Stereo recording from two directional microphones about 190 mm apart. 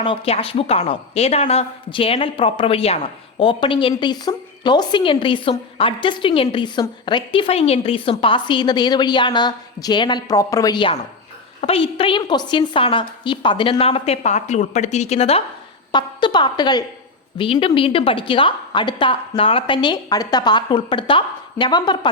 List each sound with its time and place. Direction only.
0.0 s a woman's voice: 30° left (ahead or behind)